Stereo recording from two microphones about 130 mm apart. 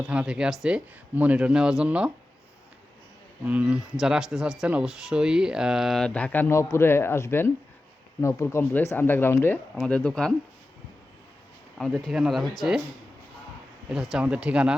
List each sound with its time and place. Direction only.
0.1 s speech: 10° right (ahead or behind)
3.4 s speech: 10° right (ahead or behind); by 10.3 s 10° left (ahead or behind)
11.8 s speech: centre (ahead or behind)
13.9 s speech: 5° right (ahead or behind)